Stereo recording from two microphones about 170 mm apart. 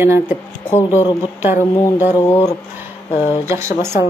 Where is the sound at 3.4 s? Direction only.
15° right (ahead or behind).